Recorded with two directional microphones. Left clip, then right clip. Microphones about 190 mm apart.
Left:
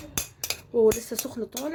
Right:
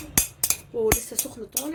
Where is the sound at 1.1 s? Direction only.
55° left (ahead or behind).